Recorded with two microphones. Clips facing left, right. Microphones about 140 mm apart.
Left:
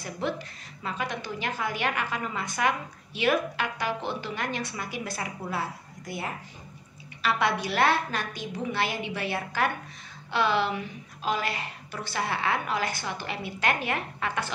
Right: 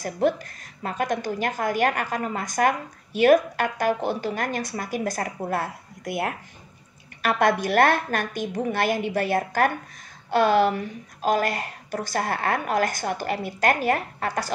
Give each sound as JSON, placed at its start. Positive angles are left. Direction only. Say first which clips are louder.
{"t": 0.0, "sound": "a woman's voice", "louder": "right 8 dB", "side_deg": -45}
{"t": 7.2, "sound": "a woman's voice", "louder": "right 5 dB", "side_deg": -50}